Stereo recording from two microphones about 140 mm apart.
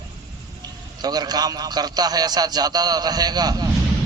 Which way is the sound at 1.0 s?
30° right (ahead or behind).